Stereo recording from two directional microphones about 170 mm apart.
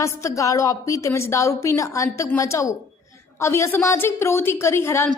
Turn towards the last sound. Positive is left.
turn(degrees=15)  # may be behind; listen again after turning